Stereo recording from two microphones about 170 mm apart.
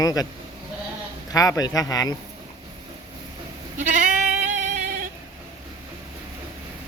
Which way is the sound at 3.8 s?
50° right (ahead or behind).